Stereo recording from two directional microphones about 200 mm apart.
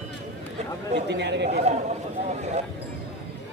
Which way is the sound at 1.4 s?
35° right (ahead or behind).